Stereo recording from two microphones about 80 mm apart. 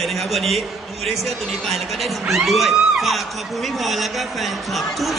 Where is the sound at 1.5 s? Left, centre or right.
Centre.